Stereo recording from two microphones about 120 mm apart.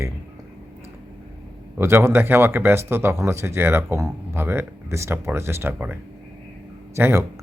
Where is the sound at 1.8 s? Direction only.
20° right (ahead or behind).